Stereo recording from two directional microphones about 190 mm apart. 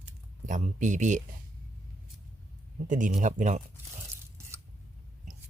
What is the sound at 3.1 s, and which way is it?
Speech, 40° right (ahead or behind).